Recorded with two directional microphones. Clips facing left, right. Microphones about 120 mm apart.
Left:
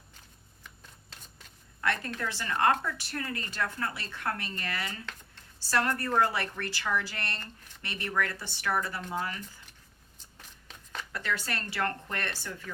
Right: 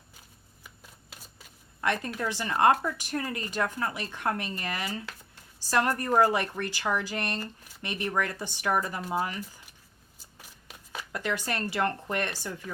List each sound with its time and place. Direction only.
0.6 s shuffling cards: 10° right (ahead or behind)
1.8 s a woman's voice: 15° right (ahead or behind)
10.2 s shuffling cards: 10° right (ahead or behind)
11.7 s speech: 20° right (ahead or behind)